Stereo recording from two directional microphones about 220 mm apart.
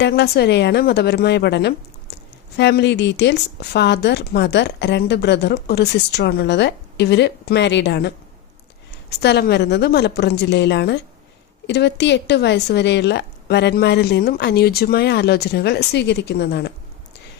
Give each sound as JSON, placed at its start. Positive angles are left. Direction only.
{"t": 0.0, "sound": "speech", "side_deg": 50}